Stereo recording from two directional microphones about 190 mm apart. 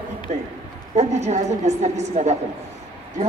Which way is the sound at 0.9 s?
35° right (ahead or behind).